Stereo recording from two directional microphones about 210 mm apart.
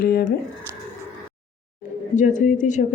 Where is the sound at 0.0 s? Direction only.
45° left (ahead or behind).